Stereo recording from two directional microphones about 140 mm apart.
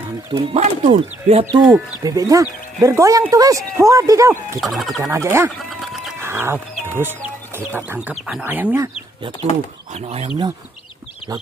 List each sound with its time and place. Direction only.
0.3 s speech: 40° right (ahead or behind)
0.6 s speech: 55° right (ahead or behind)
1.4 s speech: 30° right (ahead or behind)
4.6 s speech: centre (ahead or behind)
5.1 s speech: 20° right (ahead or behind)
5.7 s a sound: 5° right (ahead or behind)
6.2 s speech: 15° right (ahead or behind)
9.9 s speech: 50° right (ahead or behind)